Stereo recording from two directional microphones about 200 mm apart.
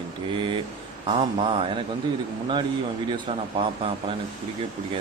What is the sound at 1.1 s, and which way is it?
Speech, 25° right (ahead or behind).